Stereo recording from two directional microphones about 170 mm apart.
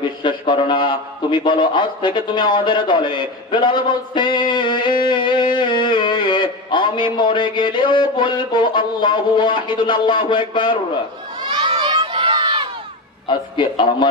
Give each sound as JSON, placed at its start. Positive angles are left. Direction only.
{"t": 0.2, "sound": "a man's voice", "side_deg": 30}
{"t": 5.0, "sound": "music", "side_deg": 25}
{"t": 7.2, "sound": "a man's voice", "side_deg": 25}
{"t": 11.4, "sound": "crowd", "side_deg": -30}
{"t": 13.3, "sound": "a man's voice", "side_deg": 25}